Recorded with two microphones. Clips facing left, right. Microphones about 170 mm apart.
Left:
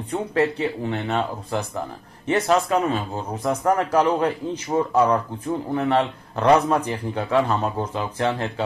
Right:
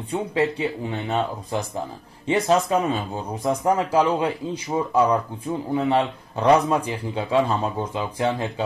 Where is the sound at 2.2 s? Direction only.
15° right (ahead or behind).